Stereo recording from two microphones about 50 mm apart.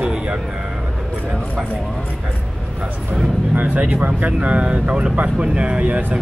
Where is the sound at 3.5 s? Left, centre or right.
Right.